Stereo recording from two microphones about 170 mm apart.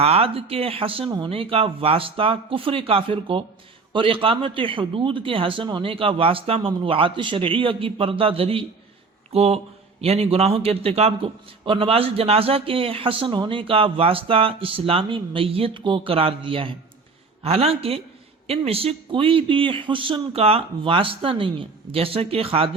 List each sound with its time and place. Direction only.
0.0 s a man's voice: 35° right (ahead or behind)